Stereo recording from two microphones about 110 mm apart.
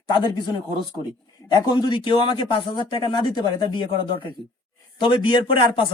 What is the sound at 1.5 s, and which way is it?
A man's voice, 40° left (ahead or behind).